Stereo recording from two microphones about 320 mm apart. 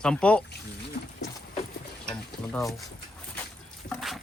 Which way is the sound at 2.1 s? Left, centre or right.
Centre.